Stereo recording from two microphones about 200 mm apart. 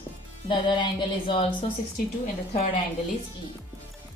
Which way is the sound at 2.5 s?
30° left (ahead or behind).